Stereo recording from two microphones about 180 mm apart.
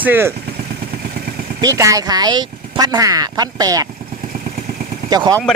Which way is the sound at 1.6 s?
20° right (ahead or behind).